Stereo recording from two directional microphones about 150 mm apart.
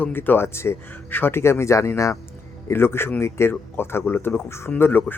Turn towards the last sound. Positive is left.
turn(degrees=15)  # may be behind; listen again after turning